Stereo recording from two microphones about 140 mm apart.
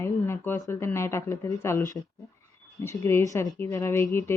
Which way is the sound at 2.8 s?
20° left (ahead or behind).